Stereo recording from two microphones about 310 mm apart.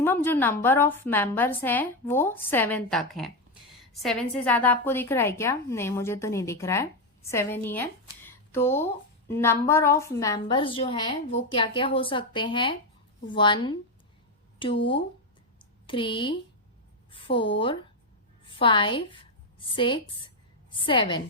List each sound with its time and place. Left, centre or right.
0.0 s speech: centre
15.5 s a sound: centre
17.1 s a woman's voice: centre